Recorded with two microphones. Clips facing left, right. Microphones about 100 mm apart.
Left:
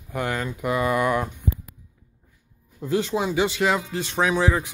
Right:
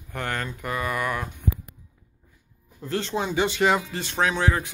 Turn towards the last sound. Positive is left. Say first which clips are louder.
# left 2 dB
turn(degrees=5)  # may be behind; listen again after turning